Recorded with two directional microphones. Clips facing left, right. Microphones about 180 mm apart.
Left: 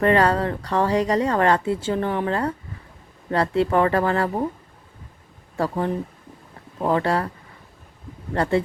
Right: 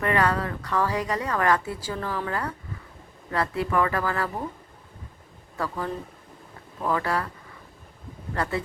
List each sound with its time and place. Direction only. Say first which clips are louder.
0.0 s speech: left 6 dB; 30° left (ahead or behind)
5.5 s speech: left 6 dB; 30° left (ahead or behind)
8.3 s speech: left 7 dB; 30° left (ahead or behind)